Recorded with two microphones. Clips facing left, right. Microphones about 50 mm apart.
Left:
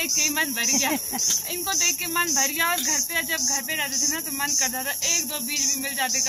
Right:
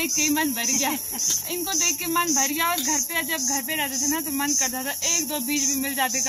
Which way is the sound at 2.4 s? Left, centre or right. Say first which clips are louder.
Even; centre.